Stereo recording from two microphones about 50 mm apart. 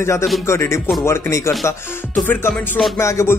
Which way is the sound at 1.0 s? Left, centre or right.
Left.